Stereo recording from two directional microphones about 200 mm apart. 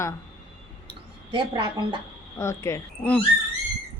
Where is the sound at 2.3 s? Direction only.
15° left (ahead or behind).